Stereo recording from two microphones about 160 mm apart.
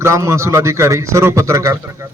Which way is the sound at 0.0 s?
20° right (ahead or behind).